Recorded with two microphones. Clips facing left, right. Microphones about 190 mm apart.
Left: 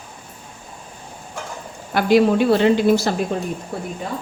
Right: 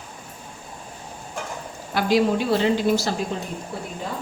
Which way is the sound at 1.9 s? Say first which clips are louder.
Left 5 dB; 60° left (ahead or behind).